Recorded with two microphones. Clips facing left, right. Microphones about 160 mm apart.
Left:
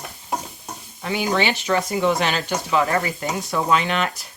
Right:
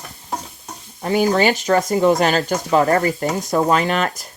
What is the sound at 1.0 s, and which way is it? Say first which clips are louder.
Speech: right 6 dB; 40° right (ahead or behind).